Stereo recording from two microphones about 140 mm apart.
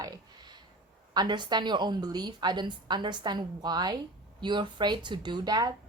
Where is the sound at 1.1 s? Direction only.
30° right (ahead or behind).